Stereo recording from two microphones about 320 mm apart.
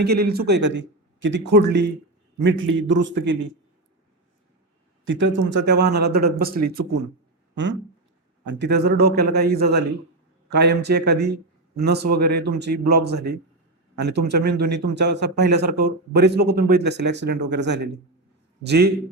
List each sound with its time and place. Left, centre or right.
0.0 s a man's voice: right
5.0 s a man's voice: right